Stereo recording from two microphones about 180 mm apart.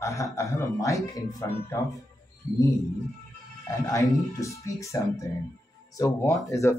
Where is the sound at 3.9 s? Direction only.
20° left (ahead or behind).